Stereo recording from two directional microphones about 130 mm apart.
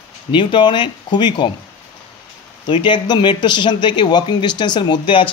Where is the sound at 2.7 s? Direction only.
35° left (ahead or behind).